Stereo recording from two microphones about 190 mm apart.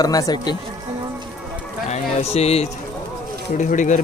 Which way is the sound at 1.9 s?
35° left (ahead or behind).